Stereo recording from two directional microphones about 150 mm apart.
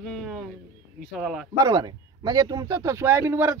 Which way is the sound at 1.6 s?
25° right (ahead or behind).